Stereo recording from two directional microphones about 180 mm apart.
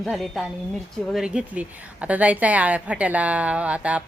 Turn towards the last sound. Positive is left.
turn(degrees=-5)  # may be behind; listen again after turning